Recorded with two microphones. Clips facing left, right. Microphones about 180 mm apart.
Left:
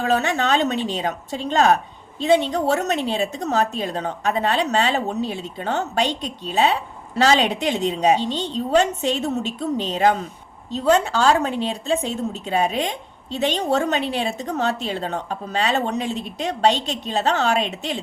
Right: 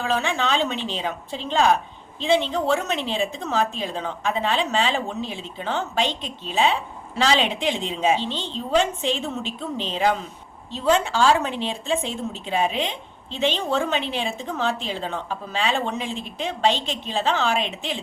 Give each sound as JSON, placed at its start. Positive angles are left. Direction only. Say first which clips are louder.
{"t": 0.0, "sound": "a woman's voice", "louder": "left 3 dB", "side_deg": 45}